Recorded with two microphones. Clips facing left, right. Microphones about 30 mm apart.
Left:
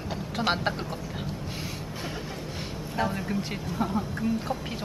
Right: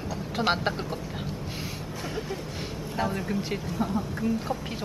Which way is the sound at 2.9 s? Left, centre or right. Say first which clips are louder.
Even; centre.